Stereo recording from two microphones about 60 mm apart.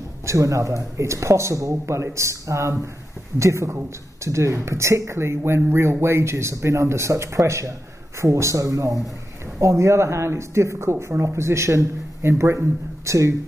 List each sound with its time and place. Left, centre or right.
0.3 s speech: right
9.6 s speech: right